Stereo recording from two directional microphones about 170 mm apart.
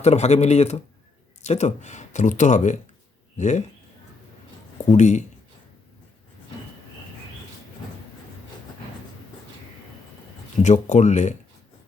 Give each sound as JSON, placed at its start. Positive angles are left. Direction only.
{"t": 0.0, "sound": "speech", "side_deg": 40}
{"t": 4.9, "sound": "speech", "side_deg": 45}
{"t": 10.6, "sound": "speech", "side_deg": 45}